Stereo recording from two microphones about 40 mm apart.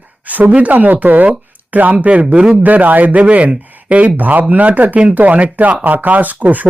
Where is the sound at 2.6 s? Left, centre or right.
Right.